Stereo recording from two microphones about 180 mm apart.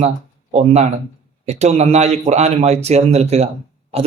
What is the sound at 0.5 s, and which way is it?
A man's voice, 35° right (ahead or behind).